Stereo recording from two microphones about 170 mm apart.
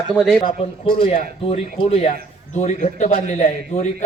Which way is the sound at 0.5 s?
35° left (ahead or behind).